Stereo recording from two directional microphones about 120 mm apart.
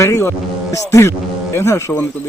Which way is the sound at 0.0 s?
25° left (ahead or behind).